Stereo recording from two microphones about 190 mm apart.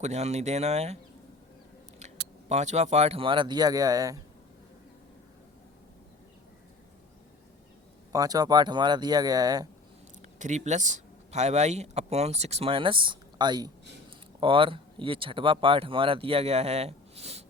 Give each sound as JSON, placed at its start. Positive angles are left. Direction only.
{"t": 0.0, "sound": "speech", "side_deg": -35}
{"t": 2.5, "sound": "speech", "side_deg": -35}
{"t": 8.1, "sound": "speech", "side_deg": -20}
{"t": 10.3, "sound": "speech", "side_deg": -40}